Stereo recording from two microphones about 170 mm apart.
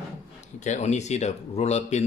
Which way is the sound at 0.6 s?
45° left (ahead or behind).